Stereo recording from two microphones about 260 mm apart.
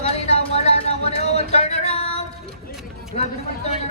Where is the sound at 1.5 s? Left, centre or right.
Left.